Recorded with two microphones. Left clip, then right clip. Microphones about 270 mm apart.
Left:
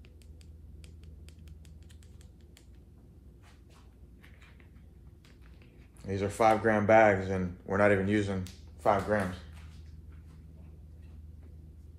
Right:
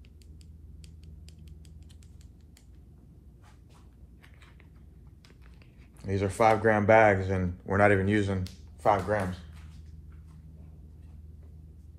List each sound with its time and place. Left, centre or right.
6.0 s speech: right